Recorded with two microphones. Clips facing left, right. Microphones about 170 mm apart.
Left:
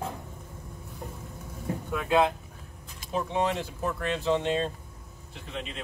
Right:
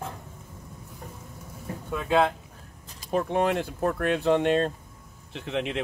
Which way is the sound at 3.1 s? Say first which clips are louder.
Right 4 dB; 55° right (ahead or behind).